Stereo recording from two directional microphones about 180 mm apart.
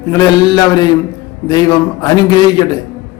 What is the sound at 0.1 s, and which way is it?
A man's voice, 20° left (ahead or behind).